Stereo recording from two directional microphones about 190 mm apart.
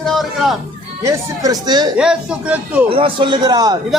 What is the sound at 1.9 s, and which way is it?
Speech, 5° right (ahead or behind).